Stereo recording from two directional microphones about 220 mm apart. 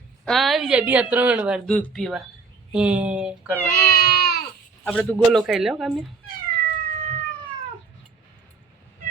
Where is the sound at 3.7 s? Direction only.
45° left (ahead or behind).